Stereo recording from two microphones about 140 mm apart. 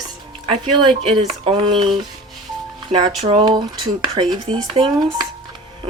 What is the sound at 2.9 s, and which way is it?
Speech, 55° right (ahead or behind).